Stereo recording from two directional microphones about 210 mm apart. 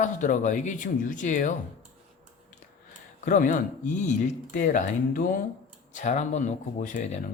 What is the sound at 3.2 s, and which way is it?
Speech, 35° left (ahead or behind).